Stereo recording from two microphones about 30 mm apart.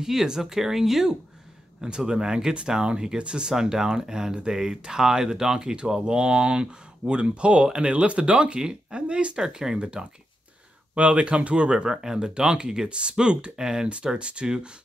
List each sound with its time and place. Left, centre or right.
0.0 s speech: centre
1.8 s speech: right
9.4 s speech: centre
11.0 s speech: right
11.7 s speech: right
12.9 s speech: right
13.8 s speech: right